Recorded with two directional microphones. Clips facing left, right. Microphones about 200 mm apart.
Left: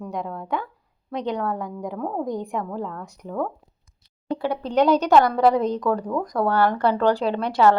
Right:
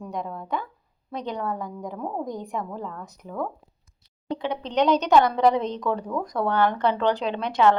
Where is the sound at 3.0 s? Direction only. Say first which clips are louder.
Left 4 dB; 10° left (ahead or behind).